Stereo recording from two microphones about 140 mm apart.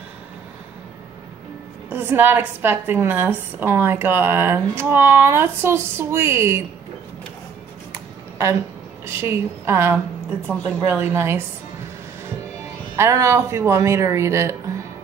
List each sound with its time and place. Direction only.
1.9 s a woman's voice: 15° right (ahead or behind)
7.9 s a sound: 20° right (ahead or behind)
9.0 s a woman's voice: 20° right (ahead or behind)
12.9 s speech: 20° right (ahead or behind)